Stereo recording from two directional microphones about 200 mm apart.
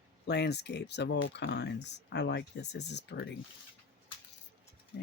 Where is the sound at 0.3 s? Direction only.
55° left (ahead or behind).